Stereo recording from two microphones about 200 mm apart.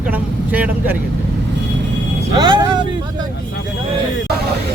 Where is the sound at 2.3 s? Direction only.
20° right (ahead or behind).